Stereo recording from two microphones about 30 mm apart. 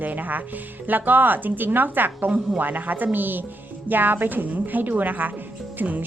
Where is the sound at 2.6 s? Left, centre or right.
Right.